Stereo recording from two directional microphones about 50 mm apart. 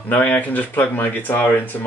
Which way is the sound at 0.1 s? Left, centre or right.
Left.